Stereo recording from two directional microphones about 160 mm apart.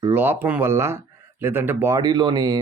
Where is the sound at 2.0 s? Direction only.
25° right (ahead or behind).